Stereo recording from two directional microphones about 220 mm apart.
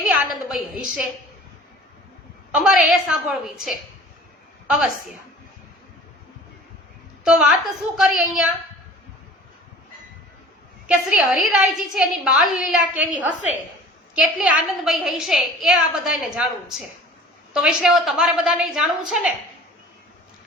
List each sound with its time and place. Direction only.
0.0 s a woman's voice: centre (ahead or behind)
2.5 s a woman's voice: centre (ahead or behind)
7.3 s a woman's voice: 5° right (ahead or behind)
10.8 s a woman's voice: 5° right (ahead or behind)
14.2 s a woman's voice: 5° right (ahead or behind)